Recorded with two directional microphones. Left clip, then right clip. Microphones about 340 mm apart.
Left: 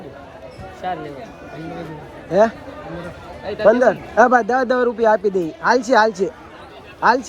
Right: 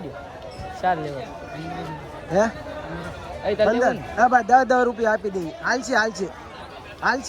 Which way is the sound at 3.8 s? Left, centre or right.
Centre.